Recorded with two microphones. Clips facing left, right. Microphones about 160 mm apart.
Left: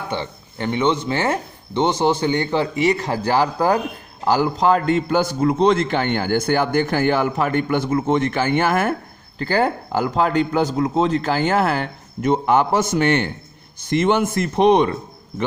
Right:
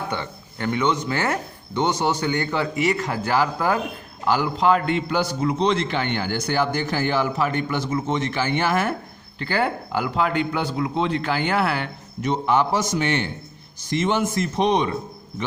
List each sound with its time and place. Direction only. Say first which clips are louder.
0.1 s a man's voice: left 3 dB; 25° left (ahead or behind); by 9.0 s 50° left (ahead or behind)
9.4 s speech: left 4 dB; 40° left (ahead or behind); by 14.8 s 55° left (ahead or behind)